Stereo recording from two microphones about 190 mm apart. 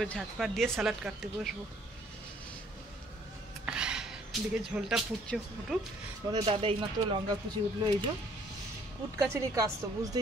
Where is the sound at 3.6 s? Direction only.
5° right (ahead or behind).